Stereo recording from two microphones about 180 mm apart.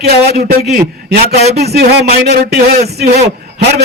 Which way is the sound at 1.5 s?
65° right (ahead or behind).